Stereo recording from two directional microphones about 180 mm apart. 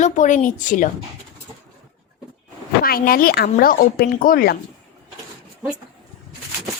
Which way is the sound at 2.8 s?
55° left (ahead or behind).